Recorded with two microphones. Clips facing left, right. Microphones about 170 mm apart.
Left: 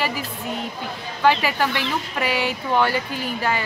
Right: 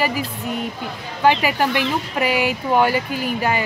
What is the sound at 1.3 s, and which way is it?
Speech, 15° right (ahead or behind).